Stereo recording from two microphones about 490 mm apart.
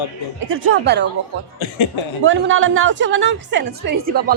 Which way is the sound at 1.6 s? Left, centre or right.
Left.